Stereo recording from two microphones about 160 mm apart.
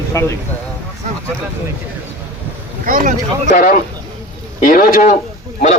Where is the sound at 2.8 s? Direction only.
55° right (ahead or behind).